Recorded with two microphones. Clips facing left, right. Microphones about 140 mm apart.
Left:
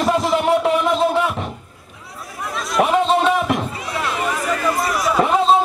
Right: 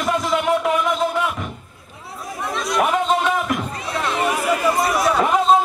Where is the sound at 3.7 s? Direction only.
5° left (ahead or behind).